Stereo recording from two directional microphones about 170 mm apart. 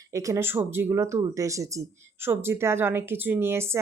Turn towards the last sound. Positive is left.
turn(degrees=-15)  # may be behind; listen again after turning